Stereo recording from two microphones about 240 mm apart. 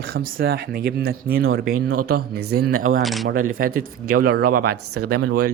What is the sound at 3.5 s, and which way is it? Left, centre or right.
Speech, right.